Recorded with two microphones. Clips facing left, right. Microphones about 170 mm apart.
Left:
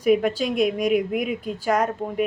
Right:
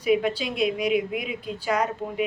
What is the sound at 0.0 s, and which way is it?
A woman's voice, 45° left (ahead or behind).